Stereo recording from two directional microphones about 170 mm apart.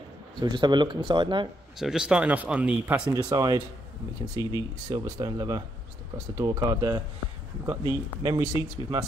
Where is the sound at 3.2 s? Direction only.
20° right (ahead or behind).